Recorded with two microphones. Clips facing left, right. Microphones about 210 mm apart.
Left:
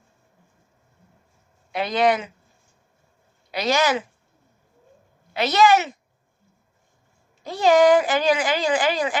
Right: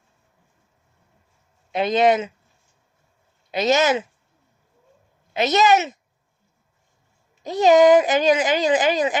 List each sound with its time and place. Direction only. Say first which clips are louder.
1.7 s speech: right 3 dB; 20° right (ahead or behind)
3.5 s speech: right 3 dB; 20° right (ahead or behind)
5.3 s speech: even; 20° right (ahead or behind)
7.4 s speech: right 2 dB; 20° right (ahead or behind)